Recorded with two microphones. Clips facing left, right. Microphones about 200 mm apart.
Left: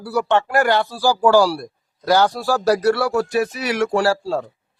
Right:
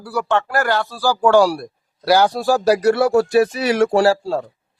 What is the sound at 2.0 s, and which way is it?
Speech, 10° right (ahead or behind).